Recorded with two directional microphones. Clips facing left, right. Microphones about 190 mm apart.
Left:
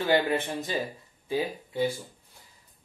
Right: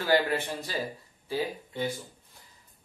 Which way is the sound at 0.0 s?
20° left (ahead or behind).